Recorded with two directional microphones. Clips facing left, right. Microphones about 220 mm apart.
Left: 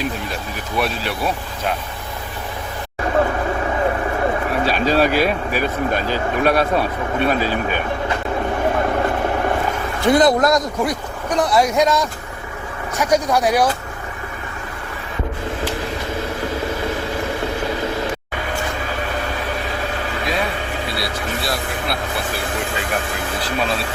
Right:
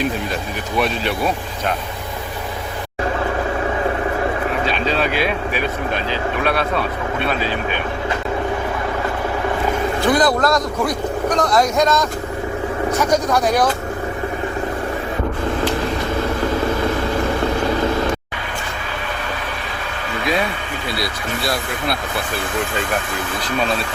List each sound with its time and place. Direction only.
4.6 s speech: 40° left (ahead or behind)
10.1 s a man's voice: 25° left (ahead or behind)